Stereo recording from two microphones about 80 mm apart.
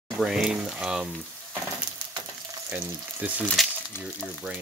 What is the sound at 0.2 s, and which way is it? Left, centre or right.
Speech, centre.